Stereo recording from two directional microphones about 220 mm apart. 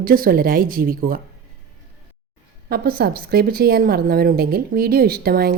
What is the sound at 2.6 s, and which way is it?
A woman's voice, 40° right (ahead or behind).